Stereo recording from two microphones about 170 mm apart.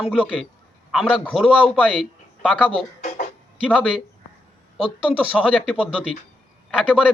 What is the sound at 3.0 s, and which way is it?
Music, 45° left (ahead or behind).